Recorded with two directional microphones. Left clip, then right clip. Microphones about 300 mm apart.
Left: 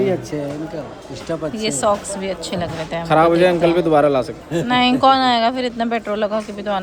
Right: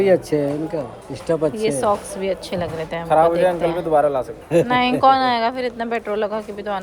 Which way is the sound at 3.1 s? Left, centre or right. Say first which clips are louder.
Left 2 dB; left.